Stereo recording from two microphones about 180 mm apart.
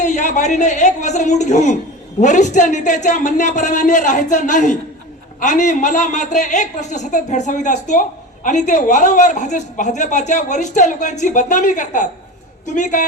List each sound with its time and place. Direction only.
0.0 s speech: 40° left (ahead or behind)